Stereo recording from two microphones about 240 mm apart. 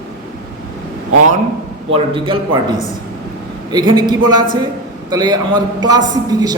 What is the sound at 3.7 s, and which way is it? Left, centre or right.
A man's voice, centre.